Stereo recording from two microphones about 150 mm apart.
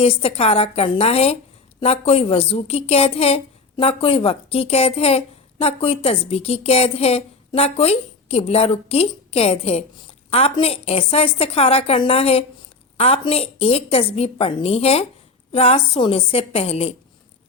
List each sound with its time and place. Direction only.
0.0 s a woman's voice: 40° left (ahead or behind)